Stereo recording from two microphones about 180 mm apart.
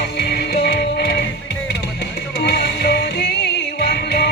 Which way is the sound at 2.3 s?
65° left (ahead or behind).